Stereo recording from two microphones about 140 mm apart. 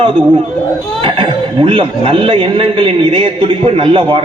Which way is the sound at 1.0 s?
40° right (ahead or behind).